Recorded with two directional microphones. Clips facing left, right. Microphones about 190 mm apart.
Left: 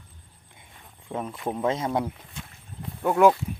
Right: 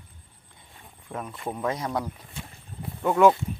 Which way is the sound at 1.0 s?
20° left (ahead or behind).